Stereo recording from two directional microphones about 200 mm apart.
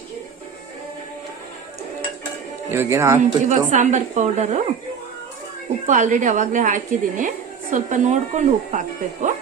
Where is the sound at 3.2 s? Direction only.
35° right (ahead or behind).